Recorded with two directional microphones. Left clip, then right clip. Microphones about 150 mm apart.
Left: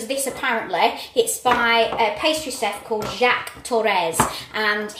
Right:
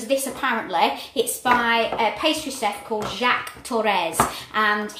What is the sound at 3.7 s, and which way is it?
Speech, 35° right (ahead or behind).